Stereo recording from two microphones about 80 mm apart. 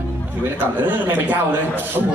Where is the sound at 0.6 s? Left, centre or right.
Right.